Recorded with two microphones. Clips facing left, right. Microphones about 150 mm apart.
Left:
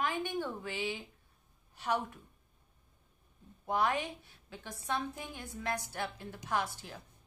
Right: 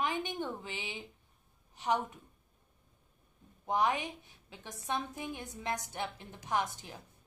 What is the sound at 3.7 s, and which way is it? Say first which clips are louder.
A woman's voice: right 1 dB; 20° right (ahead or behind).